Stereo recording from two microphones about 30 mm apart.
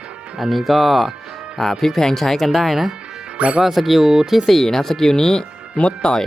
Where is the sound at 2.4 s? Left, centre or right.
Centre.